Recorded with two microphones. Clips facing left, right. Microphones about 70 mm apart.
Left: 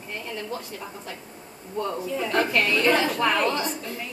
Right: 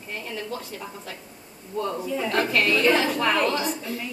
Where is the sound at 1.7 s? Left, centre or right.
Centre.